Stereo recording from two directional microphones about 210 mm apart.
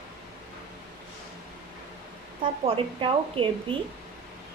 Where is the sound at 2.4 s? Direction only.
25° right (ahead or behind).